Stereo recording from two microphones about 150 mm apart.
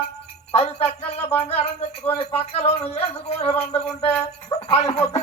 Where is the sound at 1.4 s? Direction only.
45° left (ahead or behind).